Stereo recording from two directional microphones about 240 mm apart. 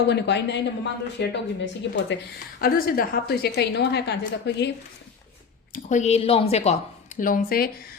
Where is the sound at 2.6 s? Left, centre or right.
Left.